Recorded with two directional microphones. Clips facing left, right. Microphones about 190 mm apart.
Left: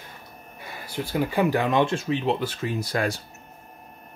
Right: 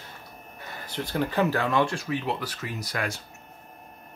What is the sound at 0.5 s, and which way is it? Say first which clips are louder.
Speech: left 2 dB; 10° left (ahead or behind).